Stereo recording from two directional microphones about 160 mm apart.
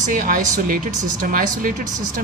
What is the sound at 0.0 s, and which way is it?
A woman's voice, 55° right (ahead or behind).